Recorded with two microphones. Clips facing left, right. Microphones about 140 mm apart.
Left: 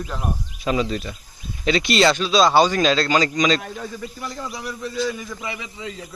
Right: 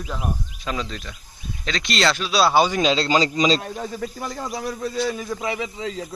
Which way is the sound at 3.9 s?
45° right (ahead or behind).